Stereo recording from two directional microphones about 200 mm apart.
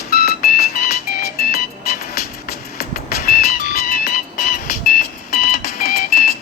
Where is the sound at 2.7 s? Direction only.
50° left (ahead or behind).